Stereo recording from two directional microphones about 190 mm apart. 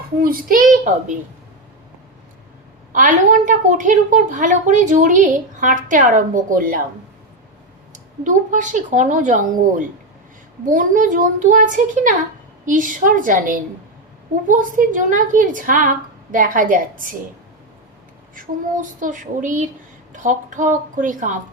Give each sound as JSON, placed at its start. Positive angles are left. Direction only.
{"t": 0.2, "sound": "a woman's voice", "side_deg": -50}
{"t": 2.9, "sound": "a woman's voice", "side_deg": -45}
{"t": 8.2, "sound": "a woman's voice", "side_deg": -40}
{"t": 18.3, "sound": "a woman's voice", "side_deg": -45}